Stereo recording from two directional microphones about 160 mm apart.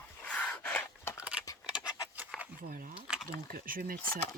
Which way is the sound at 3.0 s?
5° right (ahead or behind).